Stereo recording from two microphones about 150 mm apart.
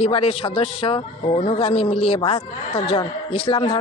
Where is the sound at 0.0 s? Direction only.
40° left (ahead or behind).